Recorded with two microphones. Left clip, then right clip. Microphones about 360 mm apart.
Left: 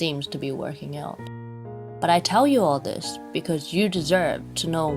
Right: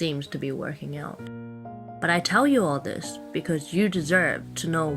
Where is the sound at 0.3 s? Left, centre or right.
Left.